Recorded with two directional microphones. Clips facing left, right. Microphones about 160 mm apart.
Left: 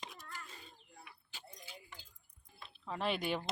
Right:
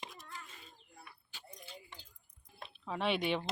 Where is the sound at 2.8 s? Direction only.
Centre (ahead or behind).